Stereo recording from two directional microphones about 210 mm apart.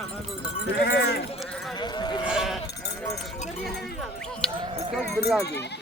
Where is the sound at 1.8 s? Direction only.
20° left (ahead or behind).